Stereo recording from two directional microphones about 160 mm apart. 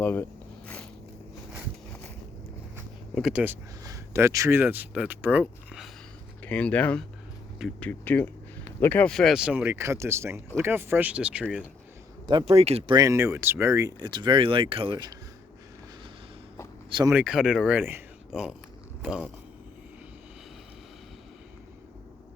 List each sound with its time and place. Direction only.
0.0 s speech: 10° left (ahead or behind)
3.2 s speech: centre (ahead or behind)
3.4 s speech: 15° right (ahead or behind)
6.4 s speech: 10° left (ahead or behind); by 11.4 s 5° right (ahead or behind)
12.3 s speech: 30° right (ahead or behind)
13.0 s speech: 20° right (ahead or behind)
17.1 s speech: 5° right (ahead or behind)